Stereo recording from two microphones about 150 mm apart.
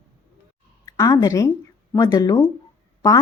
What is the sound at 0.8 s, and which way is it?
A woman's voice, 20° left (ahead or behind).